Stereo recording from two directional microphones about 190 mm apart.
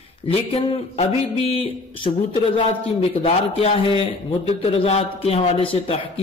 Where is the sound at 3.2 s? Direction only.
30° left (ahead or behind).